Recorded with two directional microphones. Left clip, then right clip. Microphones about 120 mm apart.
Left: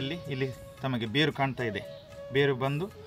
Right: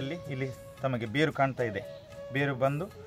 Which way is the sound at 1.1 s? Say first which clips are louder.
Even; 35° right (ahead or behind).